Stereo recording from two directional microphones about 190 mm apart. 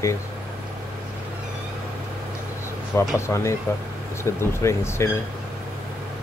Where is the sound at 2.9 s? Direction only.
15° left (ahead or behind).